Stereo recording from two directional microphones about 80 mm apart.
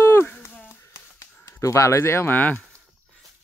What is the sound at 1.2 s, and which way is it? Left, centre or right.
Speech, left.